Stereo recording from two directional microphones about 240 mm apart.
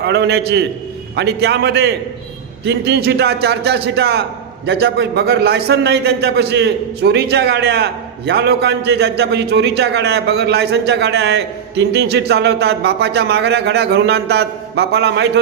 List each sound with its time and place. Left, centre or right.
0.0 s a man's voice: right